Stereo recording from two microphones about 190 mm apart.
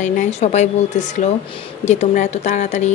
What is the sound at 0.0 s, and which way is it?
Speech, 35° left (ahead or behind).